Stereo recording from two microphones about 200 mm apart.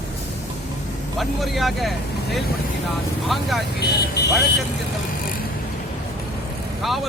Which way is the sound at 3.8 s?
55° left (ahead or behind).